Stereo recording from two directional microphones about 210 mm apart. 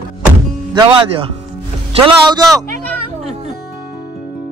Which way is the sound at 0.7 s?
20° right (ahead or behind).